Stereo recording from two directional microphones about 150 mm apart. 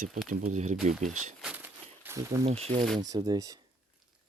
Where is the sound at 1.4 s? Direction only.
10° right (ahead or behind).